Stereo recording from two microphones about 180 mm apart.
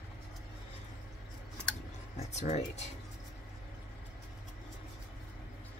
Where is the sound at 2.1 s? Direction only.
40° left (ahead or behind).